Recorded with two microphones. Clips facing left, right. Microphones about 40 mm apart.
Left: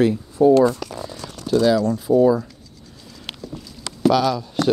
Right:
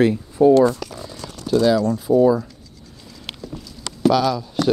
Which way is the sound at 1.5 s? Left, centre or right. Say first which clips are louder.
Even; centre.